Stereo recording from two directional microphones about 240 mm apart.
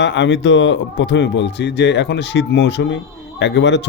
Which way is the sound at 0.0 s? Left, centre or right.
Left.